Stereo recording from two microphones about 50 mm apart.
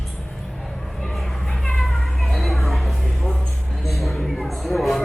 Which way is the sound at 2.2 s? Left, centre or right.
Centre.